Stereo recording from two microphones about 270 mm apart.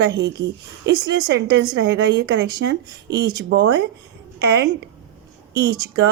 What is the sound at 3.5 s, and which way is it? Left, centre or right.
Speech, right.